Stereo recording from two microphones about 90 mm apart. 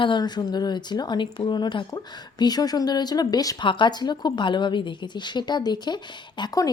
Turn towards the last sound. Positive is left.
turn(degrees=45)  # may be behind; listen again after turning